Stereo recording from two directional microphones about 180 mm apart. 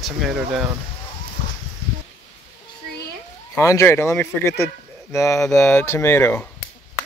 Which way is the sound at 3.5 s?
15° left (ahead or behind).